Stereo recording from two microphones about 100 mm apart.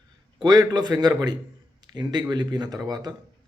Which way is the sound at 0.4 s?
45° right (ahead or behind).